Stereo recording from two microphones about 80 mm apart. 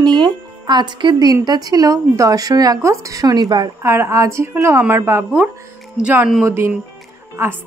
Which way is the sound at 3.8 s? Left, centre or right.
Right.